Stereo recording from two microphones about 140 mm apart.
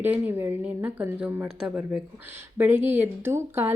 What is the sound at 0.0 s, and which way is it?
Speech, 15° right (ahead or behind).